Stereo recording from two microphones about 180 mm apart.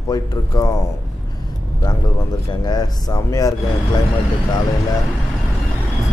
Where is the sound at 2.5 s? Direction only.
20° left (ahead or behind).